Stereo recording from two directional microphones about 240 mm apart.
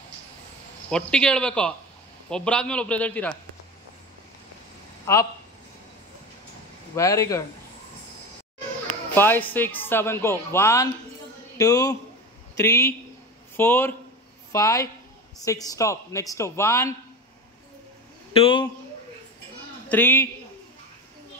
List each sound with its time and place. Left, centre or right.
0.8 s a man's voice: centre
5.1 s a man's voice: centre
7.0 s speech: centre
9.1 s speech: centre
18.3 s a man's voice: left
19.9 s speech: centre